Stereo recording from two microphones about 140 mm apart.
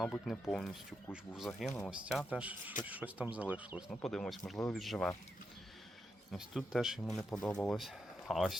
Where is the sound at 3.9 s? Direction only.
5° left (ahead or behind).